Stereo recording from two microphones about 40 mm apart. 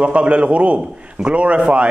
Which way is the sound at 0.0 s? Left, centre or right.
Right.